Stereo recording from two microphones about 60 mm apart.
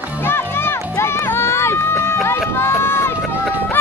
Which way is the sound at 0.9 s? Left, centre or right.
Left.